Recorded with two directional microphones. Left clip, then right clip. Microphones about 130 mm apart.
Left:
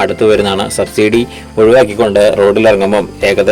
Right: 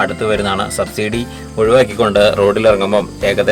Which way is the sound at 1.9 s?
15° left (ahead or behind).